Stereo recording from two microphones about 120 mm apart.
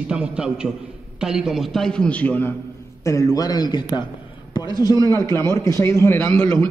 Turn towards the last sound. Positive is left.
turn(degrees=10)  # may be behind; listen again after turning